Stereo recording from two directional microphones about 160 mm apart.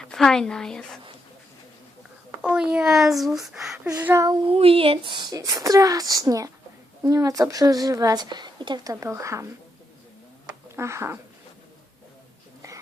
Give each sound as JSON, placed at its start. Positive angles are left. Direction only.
{"t": 0.1, "sound": "speech", "side_deg": 5}
{"t": 2.4, "sound": "speech", "side_deg": -5}
{"t": 3.8, "sound": "speech", "side_deg": -15}
{"t": 4.4, "sound": "speech", "side_deg": -35}
{"t": 10.8, "sound": "speech", "side_deg": -15}
{"t": 12.6, "sound": "a sound", "side_deg": -20}